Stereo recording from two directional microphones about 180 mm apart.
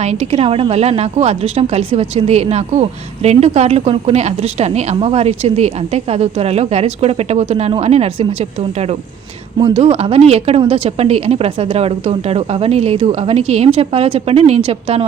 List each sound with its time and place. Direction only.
0.0 s a woman's voice: 35° right (ahead or behind)
9.6 s a woman's voice: 30° right (ahead or behind)